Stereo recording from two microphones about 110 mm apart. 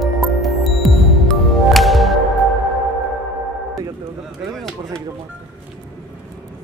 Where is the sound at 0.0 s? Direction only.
Centre (ahead or behind).